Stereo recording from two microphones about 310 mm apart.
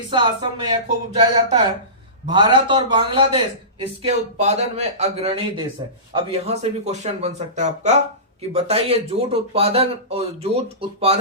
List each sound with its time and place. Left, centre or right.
0.1 s a man's voice: centre